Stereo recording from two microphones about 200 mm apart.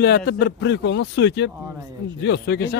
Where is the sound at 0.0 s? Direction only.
55° left (ahead or behind).